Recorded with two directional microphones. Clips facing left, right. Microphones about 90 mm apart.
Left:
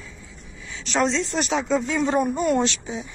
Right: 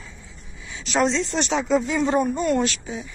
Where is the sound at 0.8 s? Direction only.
Centre (ahead or behind).